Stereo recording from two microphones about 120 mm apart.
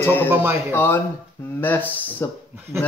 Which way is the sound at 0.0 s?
20° left (ahead or behind).